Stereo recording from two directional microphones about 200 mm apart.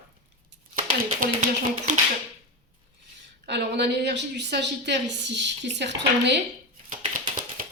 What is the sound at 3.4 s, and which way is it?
A woman's voice, 60° right (ahead or behind).